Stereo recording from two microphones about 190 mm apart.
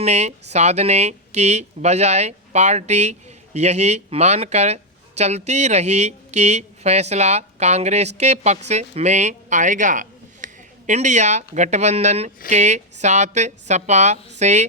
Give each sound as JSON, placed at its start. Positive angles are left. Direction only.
{"t": 0.0, "sound": "speech", "side_deg": -35}